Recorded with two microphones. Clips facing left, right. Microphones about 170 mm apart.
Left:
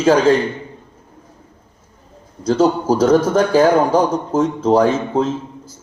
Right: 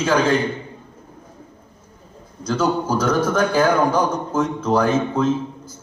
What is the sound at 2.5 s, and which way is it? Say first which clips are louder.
A man's voice: left 5 dB; 40° left (ahead or behind).